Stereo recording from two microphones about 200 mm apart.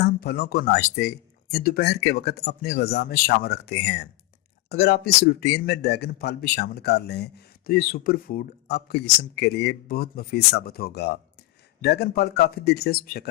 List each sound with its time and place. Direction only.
0.0 s a man's voice: 55° left (ahead or behind)